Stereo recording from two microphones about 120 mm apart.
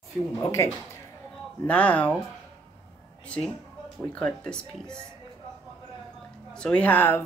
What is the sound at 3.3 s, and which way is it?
Speech, 10° left (ahead or behind).